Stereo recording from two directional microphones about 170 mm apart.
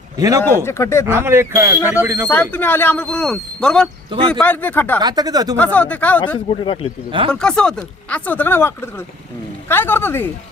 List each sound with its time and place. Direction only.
0.2 s speech: 20° right (ahead or behind)
0.6 s speech: 15° left (ahead or behind)
1.0 s speech: 15° right (ahead or behind)
2.3 s speech: 10° left (ahead or behind)
4.9 s speech: 25° right (ahead or behind)
5.5 s speech: 10° left (ahead or behind)
6.3 s speech: 30° left (ahead or behind)
7.3 s speech: 5° left (ahead or behind)